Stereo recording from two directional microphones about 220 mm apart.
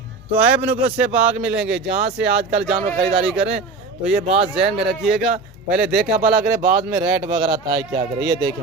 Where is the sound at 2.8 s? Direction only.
30° right (ahead or behind).